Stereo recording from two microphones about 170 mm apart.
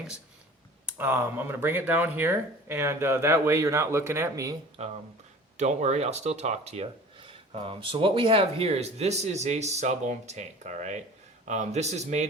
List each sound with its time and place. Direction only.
0.9 s speech: 10° right (ahead or behind)
4.8 s speech: 40° right (ahead or behind)